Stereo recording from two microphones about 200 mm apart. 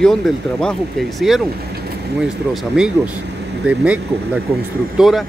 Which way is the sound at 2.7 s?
5° right (ahead or behind).